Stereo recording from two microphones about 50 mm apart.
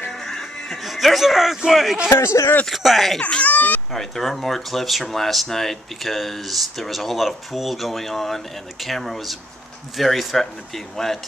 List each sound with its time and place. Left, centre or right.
0.2 s music: centre
0.8 s speech: centre
2.0 s speech: left
2.7 s speech: centre
3.2 s speech: left
3.5 s a sound: left
3.9 s speech: centre